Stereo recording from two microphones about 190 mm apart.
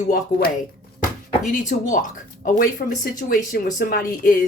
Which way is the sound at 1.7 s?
45° left (ahead or behind).